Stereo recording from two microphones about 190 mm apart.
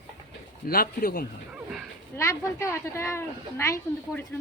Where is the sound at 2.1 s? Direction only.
15° left (ahead or behind).